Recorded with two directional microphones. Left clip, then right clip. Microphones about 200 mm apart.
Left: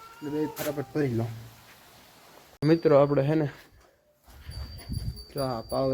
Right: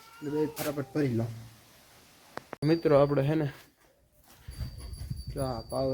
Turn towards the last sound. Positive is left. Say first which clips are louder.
# left 3 dB
turn(degrees=20)  # may be behind; listen again after turning